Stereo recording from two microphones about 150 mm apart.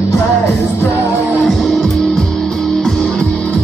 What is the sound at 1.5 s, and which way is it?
Music, centre (ahead or behind).